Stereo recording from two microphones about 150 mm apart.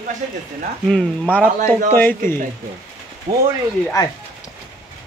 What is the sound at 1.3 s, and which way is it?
Speech, 10° left (ahead or behind).